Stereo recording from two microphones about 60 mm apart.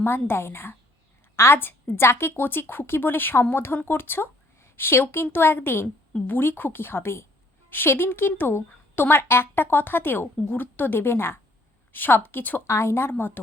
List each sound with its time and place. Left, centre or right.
0.0 s a woman's voice: left
12.6 s a woman's voice: left